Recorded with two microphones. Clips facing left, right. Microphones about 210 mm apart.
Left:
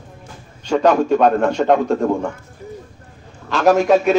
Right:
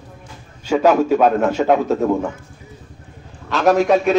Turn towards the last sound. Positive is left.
turn(degrees=0)  # may be behind; listen again after turning